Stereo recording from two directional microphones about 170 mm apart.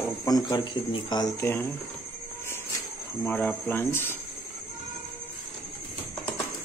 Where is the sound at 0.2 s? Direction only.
20° left (ahead or behind).